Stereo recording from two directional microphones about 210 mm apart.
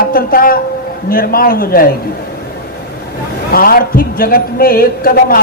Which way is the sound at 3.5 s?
45° left (ahead or behind).